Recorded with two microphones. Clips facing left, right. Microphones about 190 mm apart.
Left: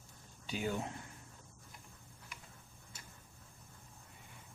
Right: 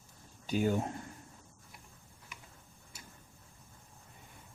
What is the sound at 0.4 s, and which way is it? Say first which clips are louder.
Speech: right 8 dB; 45° right (ahead or behind).